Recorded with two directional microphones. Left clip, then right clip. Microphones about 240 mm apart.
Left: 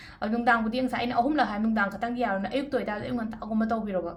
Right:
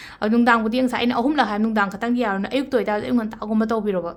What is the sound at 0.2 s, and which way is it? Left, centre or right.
A woman's voice, right.